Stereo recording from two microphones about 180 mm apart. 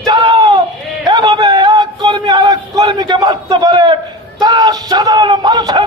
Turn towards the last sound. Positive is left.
turn(degrees=-20)  # may be behind; listen again after turning